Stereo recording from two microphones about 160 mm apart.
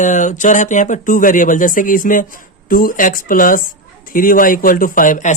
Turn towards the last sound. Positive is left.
turn(degrees=55)  # may be behind; listen again after turning